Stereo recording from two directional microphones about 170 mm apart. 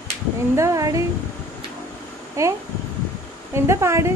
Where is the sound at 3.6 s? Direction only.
15° right (ahead or behind).